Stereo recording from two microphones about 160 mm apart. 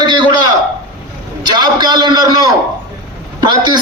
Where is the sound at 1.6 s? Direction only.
25° right (ahead or behind).